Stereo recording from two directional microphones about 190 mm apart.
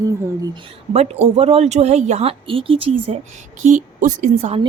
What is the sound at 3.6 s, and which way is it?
A woman's voice, 40° right (ahead or behind).